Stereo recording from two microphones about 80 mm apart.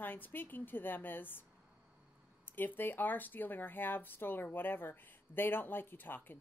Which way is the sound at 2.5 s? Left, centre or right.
Left.